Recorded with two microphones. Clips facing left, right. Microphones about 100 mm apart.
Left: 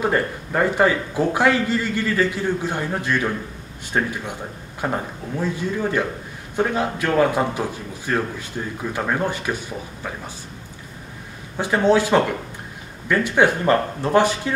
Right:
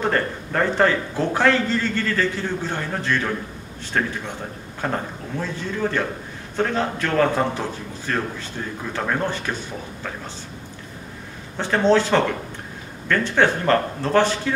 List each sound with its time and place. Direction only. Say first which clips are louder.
0.0 s a man's voice: left 1 dB; 10° left (ahead or behind)
11.5 s a man's voice: even; 10° left (ahead or behind)